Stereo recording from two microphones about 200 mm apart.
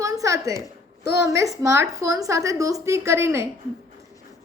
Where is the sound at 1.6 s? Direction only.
15° right (ahead or behind).